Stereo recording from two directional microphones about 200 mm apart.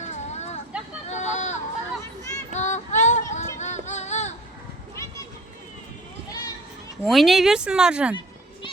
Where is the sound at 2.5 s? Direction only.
35° left (ahead or behind).